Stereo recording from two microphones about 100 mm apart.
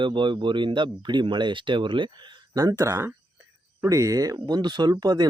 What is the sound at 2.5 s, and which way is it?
Speech, 35° right (ahead or behind).